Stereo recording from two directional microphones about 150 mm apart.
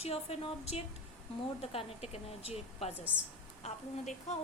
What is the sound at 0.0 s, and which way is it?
A woman's voice, 40° left (ahead or behind).